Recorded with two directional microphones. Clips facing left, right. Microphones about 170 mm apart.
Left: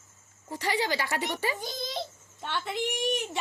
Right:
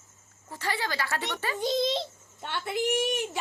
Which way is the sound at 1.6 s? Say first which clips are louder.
Right 9 dB; 25° right (ahead or behind).